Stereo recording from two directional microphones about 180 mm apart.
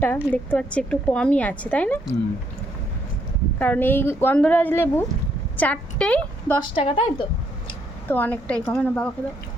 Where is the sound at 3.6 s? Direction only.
10° left (ahead or behind).